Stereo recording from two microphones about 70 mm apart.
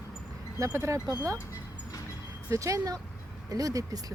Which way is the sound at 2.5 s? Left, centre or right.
Right.